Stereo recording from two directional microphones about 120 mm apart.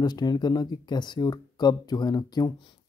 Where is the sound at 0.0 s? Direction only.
35° left (ahead or behind).